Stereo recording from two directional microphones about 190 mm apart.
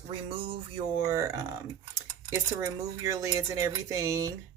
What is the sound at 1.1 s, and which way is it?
Speech, 15° right (ahead or behind).